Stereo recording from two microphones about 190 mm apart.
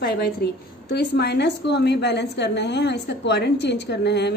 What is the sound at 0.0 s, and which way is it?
A woman's voice, 55° left (ahead or behind).